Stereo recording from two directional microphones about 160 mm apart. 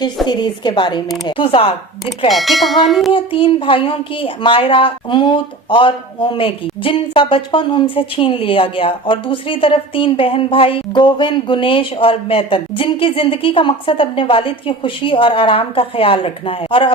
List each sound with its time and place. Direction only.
0.3 s a woman's voice: 25° left (ahead or behind)
2.3 s speech: centre (ahead or behind)
3.1 s a child's voice: 35° left (ahead or behind)